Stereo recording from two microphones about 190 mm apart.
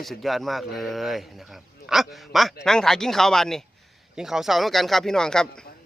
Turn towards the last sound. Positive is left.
turn(degrees=5)  # may be behind; listen again after turning